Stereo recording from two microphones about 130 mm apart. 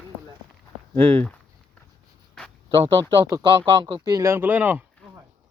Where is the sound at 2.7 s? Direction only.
40° right (ahead or behind).